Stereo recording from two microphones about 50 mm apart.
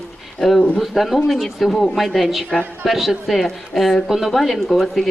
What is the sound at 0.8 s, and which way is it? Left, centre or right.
Speech, centre.